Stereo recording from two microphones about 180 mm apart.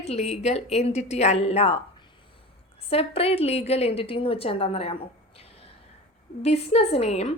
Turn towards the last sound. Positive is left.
turn(degrees=35)  # may be behind; listen again after turning